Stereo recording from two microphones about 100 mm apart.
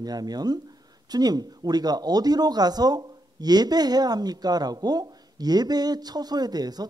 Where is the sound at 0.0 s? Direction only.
40° right (ahead or behind).